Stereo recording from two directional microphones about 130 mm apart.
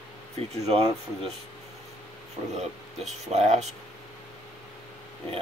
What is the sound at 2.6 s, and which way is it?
Speech, 60° right (ahead or behind).